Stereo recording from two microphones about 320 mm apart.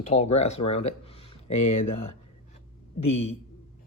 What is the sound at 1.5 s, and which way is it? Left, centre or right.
Speech, left.